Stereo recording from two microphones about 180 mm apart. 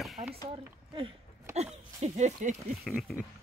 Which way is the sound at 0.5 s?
30° right (ahead or behind).